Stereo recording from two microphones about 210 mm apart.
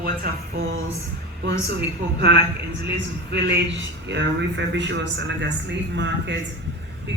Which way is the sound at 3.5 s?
55° right (ahead or behind).